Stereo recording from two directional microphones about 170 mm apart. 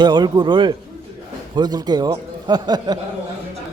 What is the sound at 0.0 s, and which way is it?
A man's voice, 25° right (ahead or behind).